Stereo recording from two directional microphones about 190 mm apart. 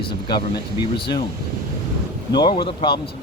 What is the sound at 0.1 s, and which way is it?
Speech, 25° left (ahead or behind).